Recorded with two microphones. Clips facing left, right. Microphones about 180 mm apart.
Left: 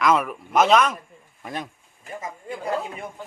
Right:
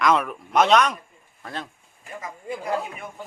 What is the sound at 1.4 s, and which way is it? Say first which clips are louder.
Speech: left 2 dB; 15° left (ahead or behind).